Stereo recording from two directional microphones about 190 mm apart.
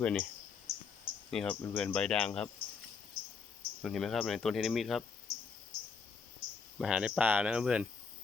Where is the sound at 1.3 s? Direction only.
5° left (ahead or behind).